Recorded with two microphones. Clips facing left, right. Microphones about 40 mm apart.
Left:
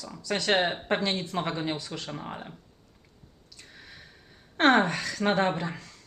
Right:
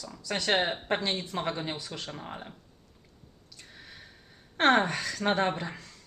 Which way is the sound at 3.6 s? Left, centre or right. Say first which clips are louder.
Left 1 dB; centre.